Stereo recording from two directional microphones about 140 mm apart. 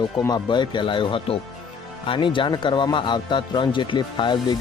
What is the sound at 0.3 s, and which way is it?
Speech, 30° left (ahead or behind).